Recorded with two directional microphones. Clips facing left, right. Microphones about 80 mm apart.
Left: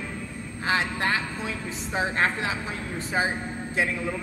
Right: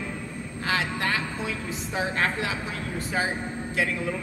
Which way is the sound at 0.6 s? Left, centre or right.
Left.